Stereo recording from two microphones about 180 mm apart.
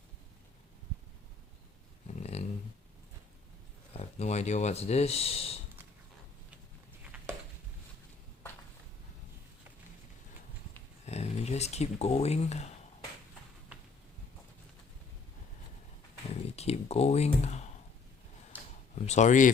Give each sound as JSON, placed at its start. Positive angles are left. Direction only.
{"t": 2.2, "sound": "dog", "side_deg": 35}
{"t": 3.9, "sound": "speech", "side_deg": 40}
{"t": 7.1, "sound": "a sound", "side_deg": -10}
{"t": 11.0, "sound": "speech", "side_deg": 40}
{"t": 16.6, "sound": "speech", "side_deg": 35}
{"t": 18.9, "sound": "speech", "side_deg": 40}